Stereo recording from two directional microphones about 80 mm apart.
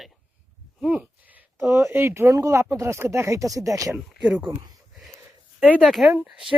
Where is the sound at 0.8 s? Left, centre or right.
Centre.